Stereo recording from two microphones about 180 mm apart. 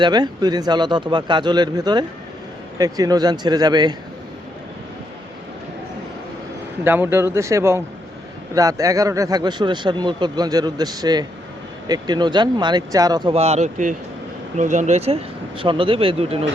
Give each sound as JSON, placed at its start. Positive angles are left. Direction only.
{"t": 0.0, "sound": "speech", "side_deg": -25}
{"t": 6.8, "sound": "speech", "side_deg": -10}